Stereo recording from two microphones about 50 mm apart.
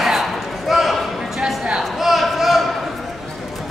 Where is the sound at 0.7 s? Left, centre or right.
Centre.